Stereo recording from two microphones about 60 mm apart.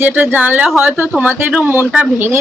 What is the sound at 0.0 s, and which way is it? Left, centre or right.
Speech, right.